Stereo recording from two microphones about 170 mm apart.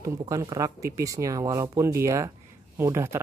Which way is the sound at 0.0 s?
20° right (ahead or behind).